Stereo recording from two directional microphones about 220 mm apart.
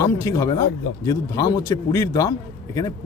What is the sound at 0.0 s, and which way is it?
A man's voice, 15° left (ahead or behind).